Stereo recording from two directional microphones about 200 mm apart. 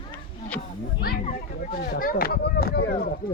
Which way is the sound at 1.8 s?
45° left (ahead or behind).